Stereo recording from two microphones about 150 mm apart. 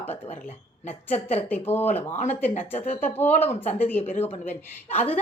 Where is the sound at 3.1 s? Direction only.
15° left (ahead or behind).